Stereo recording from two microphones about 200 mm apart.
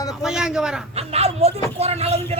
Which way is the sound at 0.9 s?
30° right (ahead or behind).